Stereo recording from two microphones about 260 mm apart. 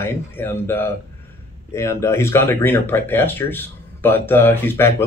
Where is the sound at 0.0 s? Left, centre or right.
Centre.